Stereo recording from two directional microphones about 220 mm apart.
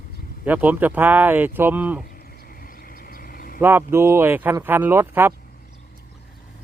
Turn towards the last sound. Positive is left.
turn(degrees=-10)  # may be behind; listen again after turning